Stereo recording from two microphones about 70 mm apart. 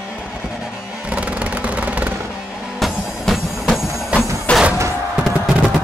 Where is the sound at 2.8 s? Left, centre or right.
Centre.